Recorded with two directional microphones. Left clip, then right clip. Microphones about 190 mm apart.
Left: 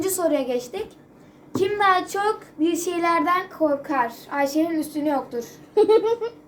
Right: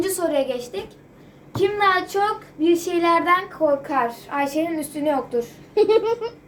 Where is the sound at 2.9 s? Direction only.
25° left (ahead or behind).